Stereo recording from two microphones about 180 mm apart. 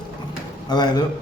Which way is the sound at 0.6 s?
25° left (ahead or behind).